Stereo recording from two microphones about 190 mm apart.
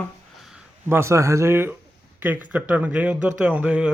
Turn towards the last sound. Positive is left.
turn(degrees=-5)  # may be behind; listen again after turning